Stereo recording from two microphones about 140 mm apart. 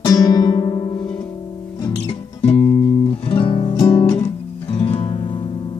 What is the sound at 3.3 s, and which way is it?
Music, 40° left (ahead or behind).